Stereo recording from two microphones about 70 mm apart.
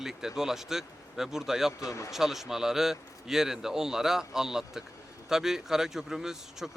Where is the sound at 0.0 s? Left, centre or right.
Centre.